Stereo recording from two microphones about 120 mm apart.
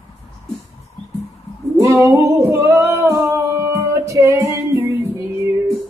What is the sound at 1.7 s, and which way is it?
Singing, 20° right (ahead or behind).